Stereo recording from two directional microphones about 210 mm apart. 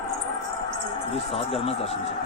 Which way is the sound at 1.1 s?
25° left (ahead or behind).